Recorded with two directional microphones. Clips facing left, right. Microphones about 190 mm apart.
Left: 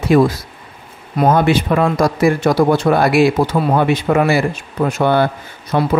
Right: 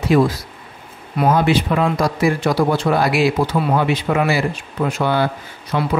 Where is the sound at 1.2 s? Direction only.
45° left (ahead or behind).